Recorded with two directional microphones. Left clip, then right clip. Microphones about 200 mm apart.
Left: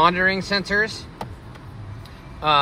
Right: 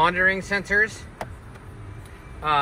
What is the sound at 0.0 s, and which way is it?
Speech, 10° left (ahead or behind).